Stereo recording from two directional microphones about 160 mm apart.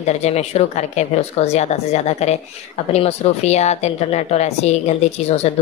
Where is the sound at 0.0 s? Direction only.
45° left (ahead or behind).